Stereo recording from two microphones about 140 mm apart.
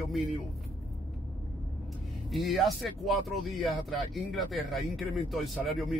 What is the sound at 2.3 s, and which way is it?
Speech, centre (ahead or behind).